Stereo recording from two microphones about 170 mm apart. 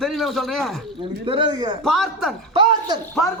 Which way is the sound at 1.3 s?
30° right (ahead or behind).